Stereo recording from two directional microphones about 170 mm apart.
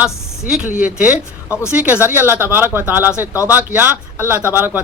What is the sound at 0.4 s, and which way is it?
Speech, 5° right (ahead or behind).